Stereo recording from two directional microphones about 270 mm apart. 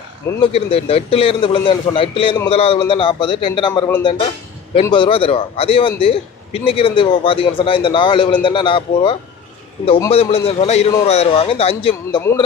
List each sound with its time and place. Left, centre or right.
0.4 s a man's voice: left
12.2 s a man's voice: centre